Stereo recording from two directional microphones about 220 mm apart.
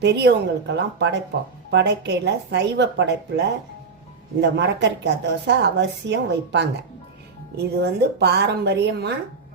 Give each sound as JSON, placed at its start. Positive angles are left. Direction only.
{"t": 0.0, "sound": "a woman's voice", "side_deg": -50}